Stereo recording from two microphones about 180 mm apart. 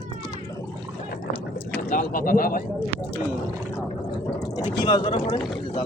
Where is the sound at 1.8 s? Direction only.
50° left (ahead or behind).